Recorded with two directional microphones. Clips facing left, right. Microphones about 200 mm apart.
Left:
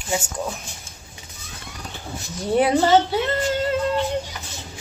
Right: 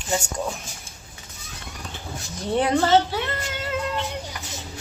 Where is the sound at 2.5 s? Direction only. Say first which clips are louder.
Left 2 dB; 10° left (ahead or behind).